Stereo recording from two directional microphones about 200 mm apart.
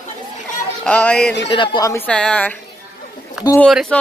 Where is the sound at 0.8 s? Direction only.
5° left (ahead or behind).